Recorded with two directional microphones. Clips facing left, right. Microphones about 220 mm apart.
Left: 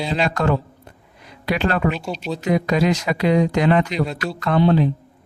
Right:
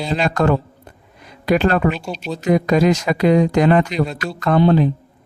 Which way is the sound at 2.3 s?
45° right (ahead or behind).